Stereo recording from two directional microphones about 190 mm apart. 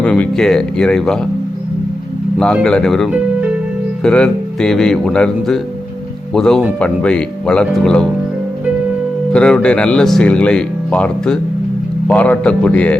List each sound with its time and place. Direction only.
0.0 s speech: 5° left (ahead or behind)
2.4 s speech: 5° left (ahead or behind)
9.3 s speech: 5° left (ahead or behind)